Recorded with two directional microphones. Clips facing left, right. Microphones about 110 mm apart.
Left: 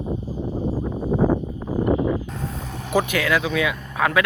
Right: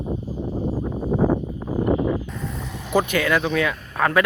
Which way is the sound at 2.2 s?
40° left (ahead or behind).